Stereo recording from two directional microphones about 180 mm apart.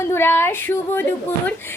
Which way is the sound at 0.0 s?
15° left (ahead or behind).